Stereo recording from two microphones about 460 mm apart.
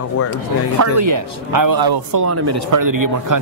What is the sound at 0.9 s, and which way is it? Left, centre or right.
Speech, right.